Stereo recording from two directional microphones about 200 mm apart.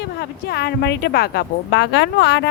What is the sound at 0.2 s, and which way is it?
Speech, 55° left (ahead or behind).